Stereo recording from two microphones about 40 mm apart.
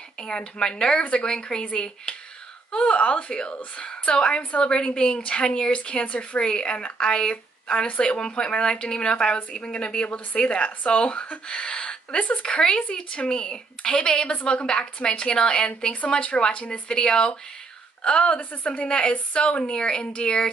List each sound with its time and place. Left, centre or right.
0.2 s speech: left
11.4 s a sound: left
12.2 s speech: left
15.9 s speech: left
16.9 s speech: centre; by 18.9 s left
18.9 s speech: left